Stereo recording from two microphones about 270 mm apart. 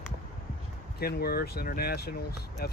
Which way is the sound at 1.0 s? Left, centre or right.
Left.